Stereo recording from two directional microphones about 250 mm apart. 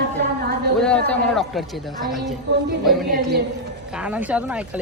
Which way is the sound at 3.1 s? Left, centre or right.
Right.